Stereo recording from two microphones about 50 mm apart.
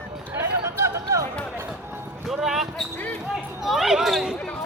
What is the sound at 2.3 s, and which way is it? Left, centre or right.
Basketball bounce, centre.